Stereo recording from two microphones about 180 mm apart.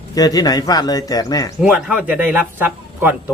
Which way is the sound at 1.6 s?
5° right (ahead or behind).